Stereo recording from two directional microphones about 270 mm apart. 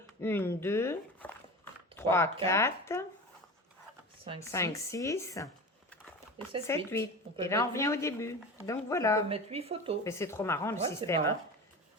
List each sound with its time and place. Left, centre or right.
0.2 s speech: centre
4.4 s speech: centre
6.7 s speech: centre
9.3 s speech: right
10.0 s speech: centre